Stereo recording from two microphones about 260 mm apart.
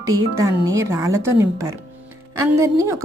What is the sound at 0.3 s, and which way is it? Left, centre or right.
A woman's voice, centre.